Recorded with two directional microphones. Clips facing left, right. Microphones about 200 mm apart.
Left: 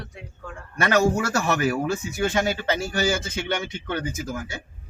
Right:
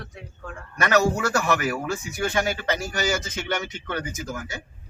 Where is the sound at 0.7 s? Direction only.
25° left (ahead or behind).